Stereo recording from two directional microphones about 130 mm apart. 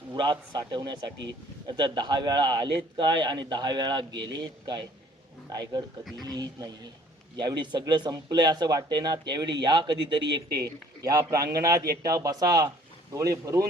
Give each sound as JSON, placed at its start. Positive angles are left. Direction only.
{"t": 0.1, "sound": "a man's voice", "side_deg": -35}
{"t": 6.2, "sound": "a man's voice", "side_deg": -30}